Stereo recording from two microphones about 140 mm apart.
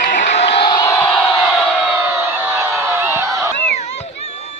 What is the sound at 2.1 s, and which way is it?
Crowd, 15° right (ahead or behind).